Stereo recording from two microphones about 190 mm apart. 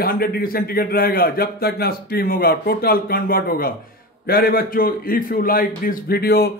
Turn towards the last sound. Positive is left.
turn(degrees=55)  # may be behind; listen again after turning